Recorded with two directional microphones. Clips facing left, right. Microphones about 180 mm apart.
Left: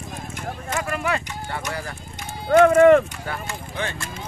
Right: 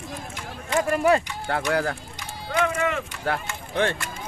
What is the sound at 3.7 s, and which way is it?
Speech, 60° right (ahead or behind).